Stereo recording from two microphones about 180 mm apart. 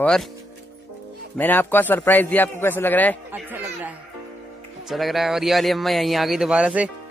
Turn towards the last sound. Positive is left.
turn(degrees=-5)  # may be behind; listen again after turning